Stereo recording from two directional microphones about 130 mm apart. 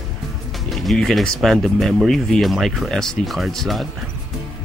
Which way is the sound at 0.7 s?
Centre (ahead or behind).